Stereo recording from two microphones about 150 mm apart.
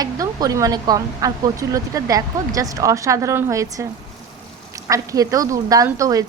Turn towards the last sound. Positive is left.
turn(degrees=-20)  # may be behind; listen again after turning